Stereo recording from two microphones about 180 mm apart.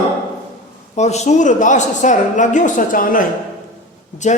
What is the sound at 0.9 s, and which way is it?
A woman's voice, 40° left (ahead or behind).